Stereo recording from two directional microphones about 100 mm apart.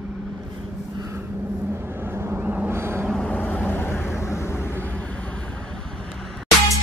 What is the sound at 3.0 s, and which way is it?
Vehicle, 10° left (ahead or behind).